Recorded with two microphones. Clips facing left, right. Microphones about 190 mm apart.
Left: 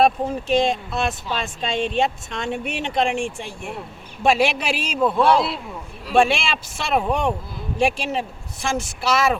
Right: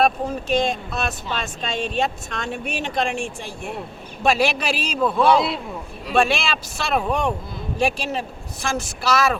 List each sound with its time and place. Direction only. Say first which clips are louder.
0.0 s speech: left 2 dB; 25° left (ahead or behind)
5.1 s a man's voice: right 1 dB; centre (ahead or behind)
6.1 s speech: left 2 dB; 25° left (ahead or behind)